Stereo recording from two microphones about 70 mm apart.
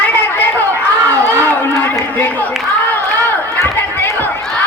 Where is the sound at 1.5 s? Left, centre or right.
Left.